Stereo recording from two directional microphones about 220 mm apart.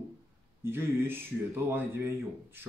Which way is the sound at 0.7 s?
10° right (ahead or behind).